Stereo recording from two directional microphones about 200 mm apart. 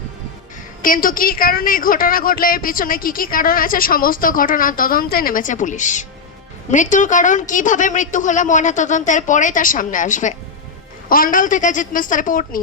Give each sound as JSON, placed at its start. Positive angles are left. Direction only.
{"t": 0.8, "sound": "a woman's voice", "side_deg": 45}